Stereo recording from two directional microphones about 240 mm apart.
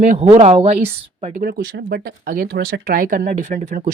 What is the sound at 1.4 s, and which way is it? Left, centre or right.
Speech, right.